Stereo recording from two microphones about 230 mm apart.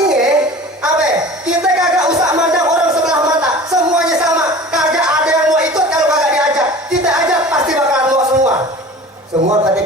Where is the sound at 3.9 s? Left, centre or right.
Centre.